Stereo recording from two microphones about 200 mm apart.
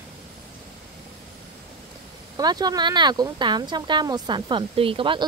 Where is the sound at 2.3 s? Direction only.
20° right (ahead or behind).